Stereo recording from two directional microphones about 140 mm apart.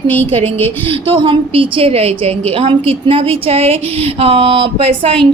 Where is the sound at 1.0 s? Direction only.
40° right (ahead or behind).